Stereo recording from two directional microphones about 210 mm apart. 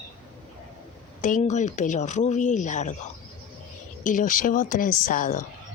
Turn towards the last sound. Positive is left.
turn(degrees=40)  # may be behind; listen again after turning